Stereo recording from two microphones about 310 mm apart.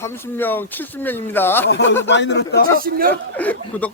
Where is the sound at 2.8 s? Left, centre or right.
Right.